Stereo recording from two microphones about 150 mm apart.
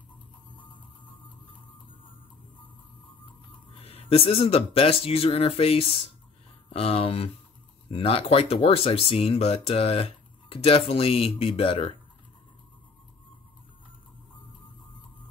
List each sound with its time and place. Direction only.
3.7 s speech: 40° left (ahead or behind)